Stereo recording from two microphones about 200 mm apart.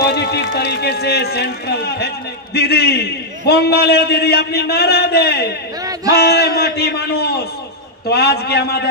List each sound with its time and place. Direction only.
0.0 s speech: 55° left (ahead or behind)